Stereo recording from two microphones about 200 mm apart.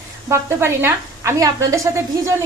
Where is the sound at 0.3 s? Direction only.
10° right (ahead or behind).